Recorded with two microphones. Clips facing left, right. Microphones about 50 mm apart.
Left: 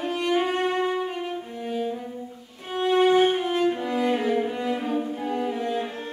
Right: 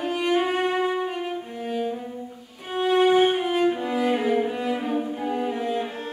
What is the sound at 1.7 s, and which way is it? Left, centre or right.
Cello, centre.